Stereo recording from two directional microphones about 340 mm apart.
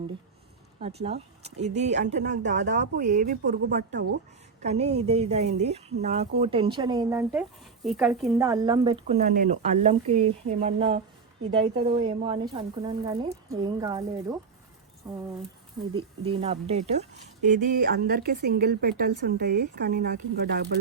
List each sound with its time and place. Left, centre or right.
1.5 s speech: centre
16.0 s speech: centre